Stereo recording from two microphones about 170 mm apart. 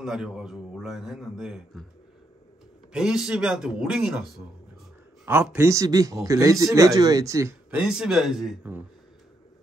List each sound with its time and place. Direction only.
0.0 s a man's voice: 5° right (ahead or behind)
2.9 s a man's voice: 5° right (ahead or behind)
7.8 s a man's voice: 5° right (ahead or behind)